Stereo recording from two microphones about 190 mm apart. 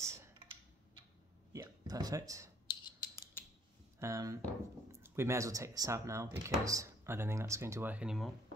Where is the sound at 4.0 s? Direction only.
15° right (ahead or behind).